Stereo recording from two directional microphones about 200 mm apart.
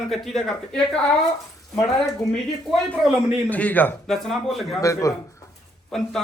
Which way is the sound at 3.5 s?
10° left (ahead or behind).